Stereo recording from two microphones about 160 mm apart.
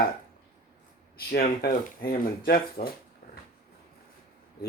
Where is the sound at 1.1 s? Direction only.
70° left (ahead or behind).